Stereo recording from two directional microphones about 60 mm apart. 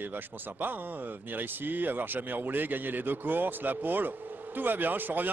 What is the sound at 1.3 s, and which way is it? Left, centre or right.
Speech, right.